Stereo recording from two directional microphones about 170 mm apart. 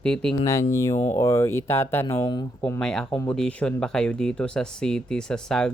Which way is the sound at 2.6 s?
10° left (ahead or behind).